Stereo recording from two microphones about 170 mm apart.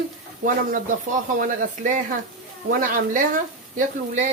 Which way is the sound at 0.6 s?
50° right (ahead or behind).